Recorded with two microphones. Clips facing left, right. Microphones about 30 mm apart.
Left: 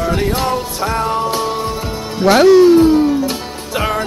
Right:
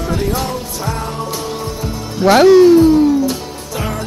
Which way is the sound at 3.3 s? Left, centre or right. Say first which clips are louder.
Left 1 dB; left.